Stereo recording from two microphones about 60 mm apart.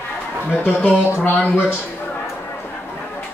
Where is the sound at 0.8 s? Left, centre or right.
Left.